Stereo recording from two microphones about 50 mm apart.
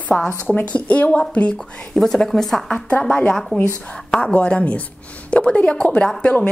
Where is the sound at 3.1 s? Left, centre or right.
Left.